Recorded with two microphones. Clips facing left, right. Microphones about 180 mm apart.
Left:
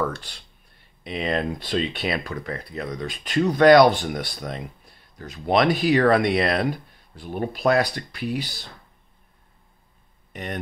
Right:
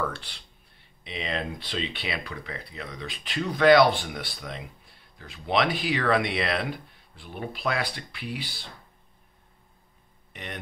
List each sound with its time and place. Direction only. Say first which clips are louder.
0.0 s speech: left 5 dB; 45° left (ahead or behind)
10.3 s speech: left 7 dB; 45° left (ahead or behind)